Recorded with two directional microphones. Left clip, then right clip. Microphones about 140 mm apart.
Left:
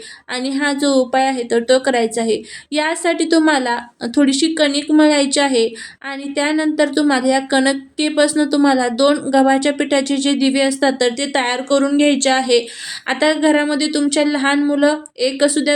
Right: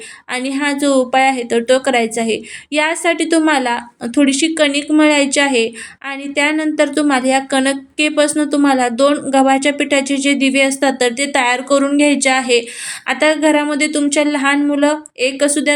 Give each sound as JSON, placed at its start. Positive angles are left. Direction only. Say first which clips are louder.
{"t": 0.3, "sound": "a woman's voice", "louder": "right 1 dB", "side_deg": -15}